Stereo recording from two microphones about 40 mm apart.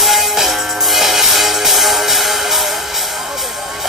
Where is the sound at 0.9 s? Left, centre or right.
Centre.